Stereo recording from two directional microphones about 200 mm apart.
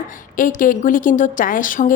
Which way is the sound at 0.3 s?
40° left (ahead or behind).